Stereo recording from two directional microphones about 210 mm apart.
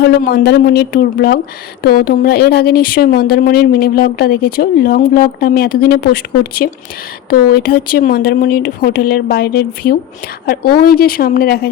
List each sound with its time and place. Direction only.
0.0 s a woman's voice: 50° left (ahead or behind)